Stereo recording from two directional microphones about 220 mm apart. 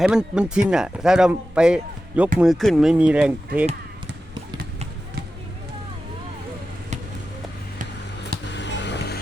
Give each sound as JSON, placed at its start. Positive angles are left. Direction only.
{"t": 0.0, "sound": "speech", "side_deg": -5}
{"t": 8.5, "sound": "music", "side_deg": 55}